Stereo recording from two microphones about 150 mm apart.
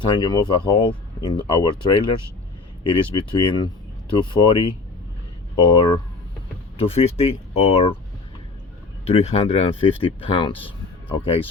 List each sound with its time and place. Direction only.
0.0 s speech: 30° left (ahead or behind)
9.0 s speech: 40° left (ahead or behind)